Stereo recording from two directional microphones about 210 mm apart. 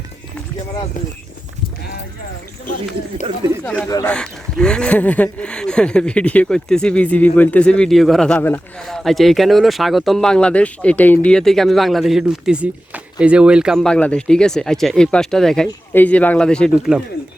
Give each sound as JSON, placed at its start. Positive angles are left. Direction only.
{"t": 3.8, "sound": "speech", "side_deg": 15}
{"t": 4.1, "sound": "speech", "side_deg": 5}